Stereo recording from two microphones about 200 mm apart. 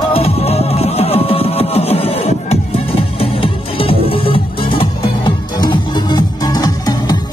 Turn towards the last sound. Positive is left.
turn(degrees=20)  # may be behind; listen again after turning